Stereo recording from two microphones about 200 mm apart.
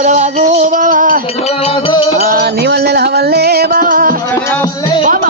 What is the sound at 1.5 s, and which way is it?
Music, 30° left (ahead or behind).